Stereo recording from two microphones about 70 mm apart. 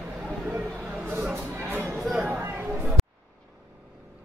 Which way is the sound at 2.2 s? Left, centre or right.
Right.